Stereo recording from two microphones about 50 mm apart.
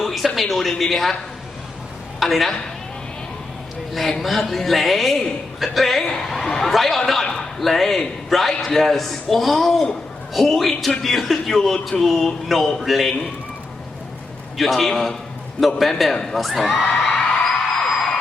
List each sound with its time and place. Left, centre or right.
0.0 s a sound: centre
0.3 s a man's voice: centre
2.1 s a man's voice: centre
4.2 s a man's voice: centre
14.6 s a man's voice: centre
17.3 s music: centre